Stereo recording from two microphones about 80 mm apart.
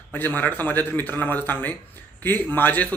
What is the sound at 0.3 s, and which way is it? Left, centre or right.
Speech, left.